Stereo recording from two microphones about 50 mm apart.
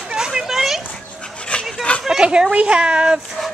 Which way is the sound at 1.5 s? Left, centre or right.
Left.